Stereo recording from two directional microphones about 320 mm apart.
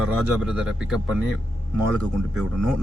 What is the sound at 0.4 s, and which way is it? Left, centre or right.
A man's voice, centre.